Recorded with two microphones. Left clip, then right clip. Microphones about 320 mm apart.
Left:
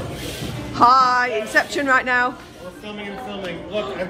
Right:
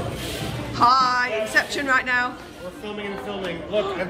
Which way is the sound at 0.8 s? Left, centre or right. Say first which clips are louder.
Left 4 dB; centre.